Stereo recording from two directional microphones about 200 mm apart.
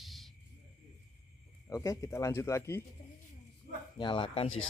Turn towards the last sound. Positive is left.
turn(degrees=90)